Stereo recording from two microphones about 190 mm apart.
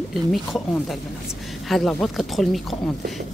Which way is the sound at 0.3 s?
Centre (ahead or behind).